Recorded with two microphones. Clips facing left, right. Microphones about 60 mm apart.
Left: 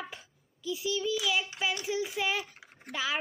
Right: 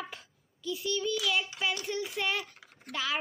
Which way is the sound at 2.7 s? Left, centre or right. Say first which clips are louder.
Left 1 dB; left.